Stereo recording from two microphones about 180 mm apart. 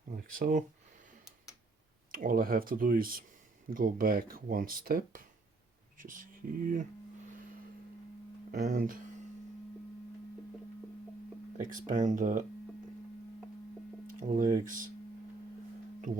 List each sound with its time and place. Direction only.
0.2 s speech: 50° right (ahead or behind)
2.1 s speech: 50° right (ahead or behind)
8.5 s speech: 45° right (ahead or behind)
11.5 s speech: 45° right (ahead or behind)
14.1 s speech: 45° right (ahead or behind)
16.1 s speech: 45° right (ahead or behind)